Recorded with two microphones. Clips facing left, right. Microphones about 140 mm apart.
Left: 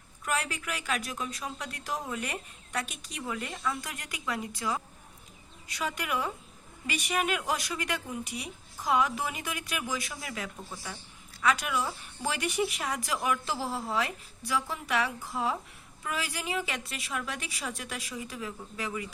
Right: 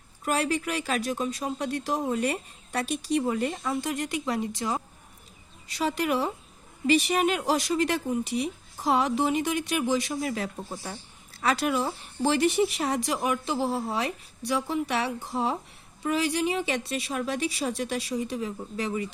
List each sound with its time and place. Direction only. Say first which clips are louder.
0.3 s speech: right 6 dB; 30° right (ahead or behind)
12.2 s speech: right 8 dB; 30° right (ahead or behind)